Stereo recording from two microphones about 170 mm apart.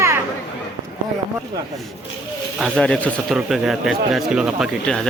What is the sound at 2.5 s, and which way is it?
A man's voice, centre (ahead or behind).